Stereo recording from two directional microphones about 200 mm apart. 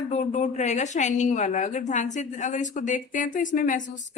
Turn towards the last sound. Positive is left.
turn(degrees=40)  # may be behind; listen again after turning